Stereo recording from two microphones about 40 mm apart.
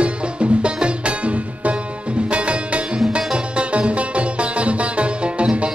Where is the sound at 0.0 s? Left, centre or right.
Right.